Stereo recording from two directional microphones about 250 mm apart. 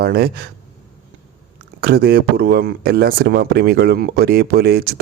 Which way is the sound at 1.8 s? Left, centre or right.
Right.